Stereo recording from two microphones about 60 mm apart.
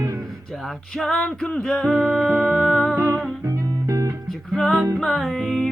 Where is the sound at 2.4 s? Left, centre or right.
Centre.